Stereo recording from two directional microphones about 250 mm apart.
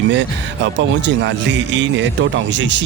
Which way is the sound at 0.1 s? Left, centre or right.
Right.